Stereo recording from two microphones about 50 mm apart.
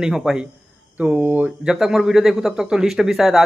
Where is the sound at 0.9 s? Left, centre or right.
Right.